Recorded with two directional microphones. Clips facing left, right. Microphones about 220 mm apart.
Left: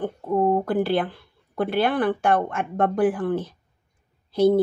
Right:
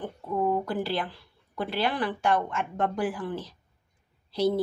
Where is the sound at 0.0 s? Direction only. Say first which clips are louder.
Left 6 dB; 45° left (ahead or behind).